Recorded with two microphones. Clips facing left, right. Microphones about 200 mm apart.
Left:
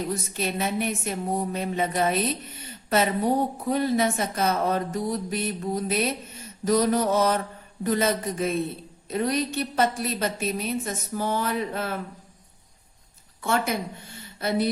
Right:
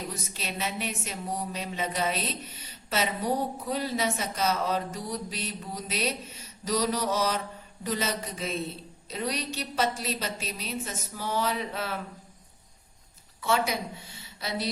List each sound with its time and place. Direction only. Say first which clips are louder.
0.3 s speech: left 7 dB; 50° left (ahead or behind)
13.4 s a woman's voice: left 2 dB; 50° left (ahead or behind)